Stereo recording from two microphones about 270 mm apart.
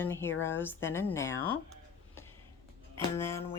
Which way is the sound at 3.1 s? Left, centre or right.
Centre.